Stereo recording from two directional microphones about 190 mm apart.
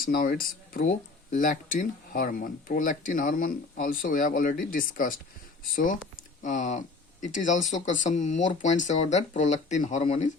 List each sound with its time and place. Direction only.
0.0 s speech: 50° left (ahead or behind)